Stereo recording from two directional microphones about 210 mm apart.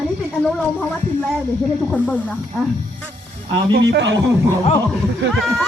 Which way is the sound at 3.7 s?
55° right (ahead or behind).